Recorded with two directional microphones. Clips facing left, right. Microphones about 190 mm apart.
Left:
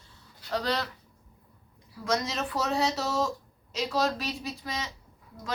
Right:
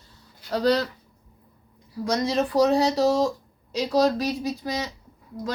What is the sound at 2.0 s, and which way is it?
Speech, 35° right (ahead or behind).